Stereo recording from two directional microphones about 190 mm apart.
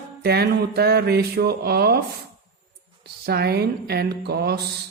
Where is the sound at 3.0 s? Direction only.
55° right (ahead or behind).